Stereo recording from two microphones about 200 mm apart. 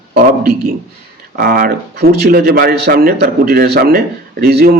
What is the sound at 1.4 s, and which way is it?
A man's voice, 45° right (ahead or behind).